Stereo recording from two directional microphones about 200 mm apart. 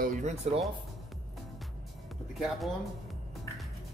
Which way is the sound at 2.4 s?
Centre (ahead or behind).